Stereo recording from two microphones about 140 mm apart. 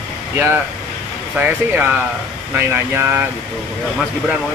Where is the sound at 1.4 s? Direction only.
15° right (ahead or behind).